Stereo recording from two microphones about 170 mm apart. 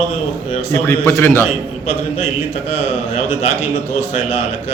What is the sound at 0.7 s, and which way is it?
Speech, 15° left (ahead or behind).